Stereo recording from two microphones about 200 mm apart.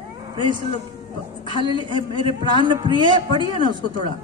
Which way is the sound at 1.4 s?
25° left (ahead or behind).